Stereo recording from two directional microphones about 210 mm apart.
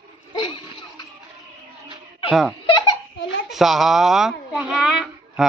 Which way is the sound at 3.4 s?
Centre (ahead or behind).